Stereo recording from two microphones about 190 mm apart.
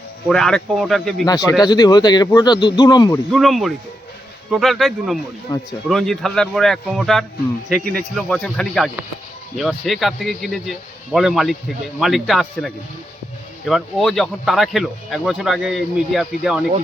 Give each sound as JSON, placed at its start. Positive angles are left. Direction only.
{"t": 0.3, "sound": "speech", "side_deg": 0}
{"t": 1.3, "sound": "speech", "side_deg": 20}
{"t": 3.3, "sound": "speech", "side_deg": 0}
{"t": 5.5, "sound": "speech", "side_deg": 20}
{"t": 5.9, "sound": "speech", "side_deg": 0}